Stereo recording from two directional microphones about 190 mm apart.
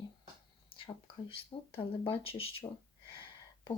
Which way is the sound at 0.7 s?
30° left (ahead or behind).